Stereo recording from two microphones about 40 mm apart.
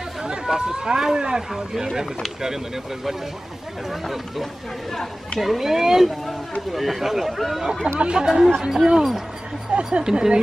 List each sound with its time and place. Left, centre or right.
0.2 s chatter: centre
1.5 s speech: centre
5.4 s speech: centre
8.0 s speech: right
8.5 s speech: centre
9.7 s speech: right